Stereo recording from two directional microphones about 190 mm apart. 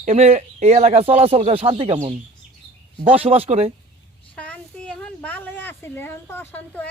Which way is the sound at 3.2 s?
30° right (ahead or behind).